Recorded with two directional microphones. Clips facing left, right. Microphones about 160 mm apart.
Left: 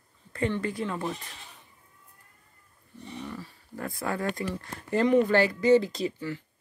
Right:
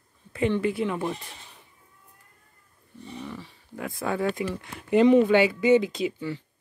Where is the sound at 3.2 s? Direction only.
Centre (ahead or behind).